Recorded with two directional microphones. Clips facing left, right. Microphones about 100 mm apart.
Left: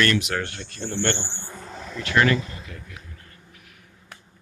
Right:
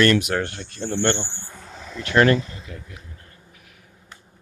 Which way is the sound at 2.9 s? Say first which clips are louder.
Even; 20° right (ahead or behind).